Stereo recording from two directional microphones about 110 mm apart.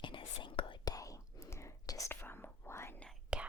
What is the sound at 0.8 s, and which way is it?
Whispering, 30° left (ahead or behind).